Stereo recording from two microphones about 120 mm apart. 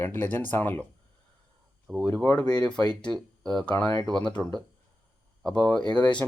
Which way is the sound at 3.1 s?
5° left (ahead or behind).